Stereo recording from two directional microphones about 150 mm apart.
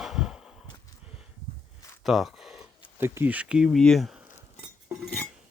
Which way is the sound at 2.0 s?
Centre (ahead or behind).